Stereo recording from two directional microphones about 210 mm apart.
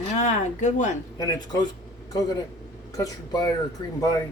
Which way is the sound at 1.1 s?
20° left (ahead or behind).